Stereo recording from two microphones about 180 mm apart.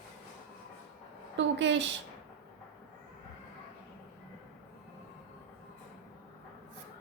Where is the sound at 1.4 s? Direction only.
85° right.